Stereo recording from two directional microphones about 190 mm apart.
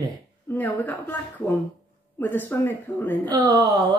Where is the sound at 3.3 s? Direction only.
20° right (ahead or behind).